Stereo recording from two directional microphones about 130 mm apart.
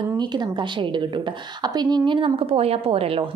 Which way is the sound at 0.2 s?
35° right (ahead or behind).